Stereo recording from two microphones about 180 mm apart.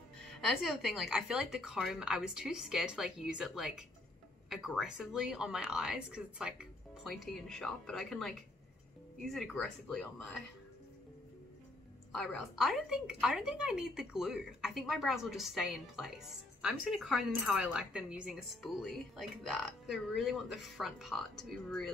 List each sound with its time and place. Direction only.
0.2 s a woman's voice: centre (ahead or behind)
12.1 s a woman's voice: centre (ahead or behind)